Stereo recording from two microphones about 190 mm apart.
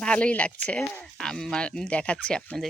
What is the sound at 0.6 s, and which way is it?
Speech, 5° left (ahead or behind).